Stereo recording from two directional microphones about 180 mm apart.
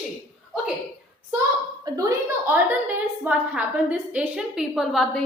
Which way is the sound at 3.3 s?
10° right (ahead or behind).